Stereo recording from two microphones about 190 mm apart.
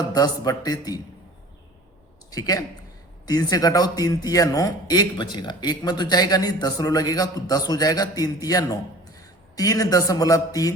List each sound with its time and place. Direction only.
0.1 s a man's voice: 20° left (ahead or behind)
2.3 s a man's voice: 20° left (ahead or behind)